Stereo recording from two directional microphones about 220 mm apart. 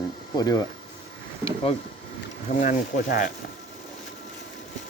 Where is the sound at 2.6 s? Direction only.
40° left (ahead or behind).